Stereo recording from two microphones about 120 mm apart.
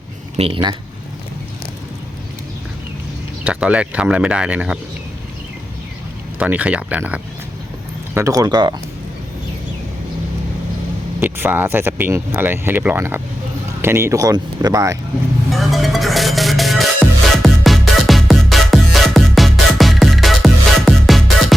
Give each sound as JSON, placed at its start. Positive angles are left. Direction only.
{"t": 0.3, "sound": "speech", "side_deg": -55}
{"t": 3.4, "sound": "speech", "side_deg": -10}
{"t": 6.4, "sound": "speech", "side_deg": -10}
{"t": 8.1, "sound": "speech", "side_deg": -25}
{"t": 11.2, "sound": "speech", "side_deg": -15}
{"t": 15.4, "sound": "music", "side_deg": 0}